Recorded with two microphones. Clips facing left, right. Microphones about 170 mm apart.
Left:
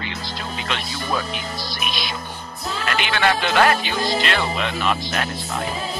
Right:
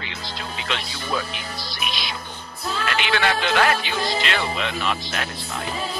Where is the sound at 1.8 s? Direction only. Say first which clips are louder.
Left 1 dB; 45° left (ahead or behind).